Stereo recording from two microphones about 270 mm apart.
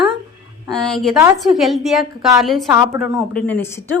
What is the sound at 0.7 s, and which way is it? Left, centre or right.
A woman's voice, centre.